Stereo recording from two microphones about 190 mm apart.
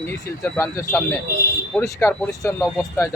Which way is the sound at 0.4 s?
15° left (ahead or behind).